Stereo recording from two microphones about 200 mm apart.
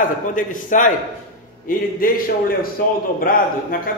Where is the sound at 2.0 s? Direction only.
45° left (ahead or behind).